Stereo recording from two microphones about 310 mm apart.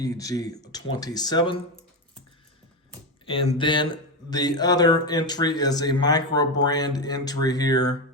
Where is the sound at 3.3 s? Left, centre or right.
Centre.